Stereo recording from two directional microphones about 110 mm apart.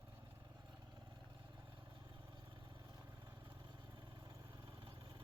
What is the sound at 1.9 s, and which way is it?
Vehicle, 50° right (ahead or behind).